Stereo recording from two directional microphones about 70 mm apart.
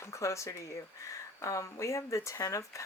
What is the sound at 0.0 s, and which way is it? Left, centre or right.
Speech, left.